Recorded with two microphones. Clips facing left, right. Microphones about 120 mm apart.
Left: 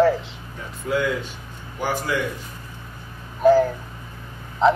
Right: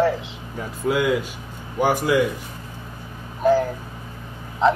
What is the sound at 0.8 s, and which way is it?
Speech, 10° right (ahead or behind).